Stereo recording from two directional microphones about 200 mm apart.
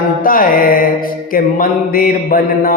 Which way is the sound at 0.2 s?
45° left (ahead or behind).